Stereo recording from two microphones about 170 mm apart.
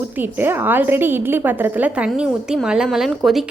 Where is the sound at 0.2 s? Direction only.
10° right (ahead or behind).